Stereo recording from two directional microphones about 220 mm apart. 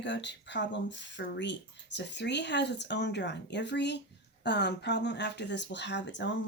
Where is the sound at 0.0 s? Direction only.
55° left (ahead or behind).